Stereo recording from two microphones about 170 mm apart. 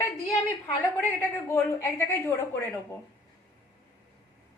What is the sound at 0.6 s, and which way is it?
A woman's voice, 10° left (ahead or behind).